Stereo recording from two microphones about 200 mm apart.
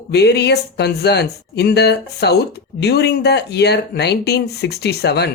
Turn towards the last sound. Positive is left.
turn(degrees=55)  # may be behind; listen again after turning